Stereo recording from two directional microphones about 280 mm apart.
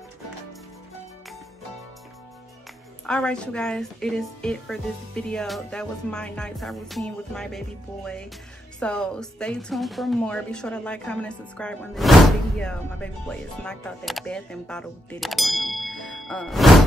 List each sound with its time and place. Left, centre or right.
3.1 s a woman's voice: centre